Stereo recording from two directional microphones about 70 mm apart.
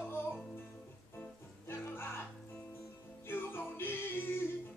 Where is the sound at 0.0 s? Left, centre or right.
Left.